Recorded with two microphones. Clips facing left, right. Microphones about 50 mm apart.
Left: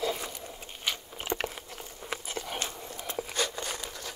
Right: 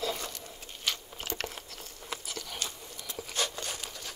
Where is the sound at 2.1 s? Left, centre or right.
Left.